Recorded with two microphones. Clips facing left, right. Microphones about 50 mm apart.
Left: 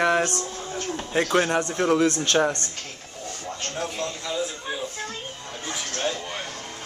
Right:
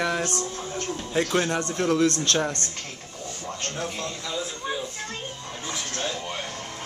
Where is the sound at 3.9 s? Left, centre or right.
Centre.